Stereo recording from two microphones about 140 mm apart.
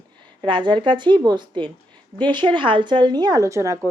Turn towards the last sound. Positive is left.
turn(degrees=-20)  # may be behind; listen again after turning